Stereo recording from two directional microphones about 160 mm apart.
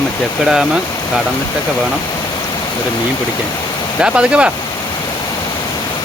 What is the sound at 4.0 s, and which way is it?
Speech, 5° right (ahead or behind).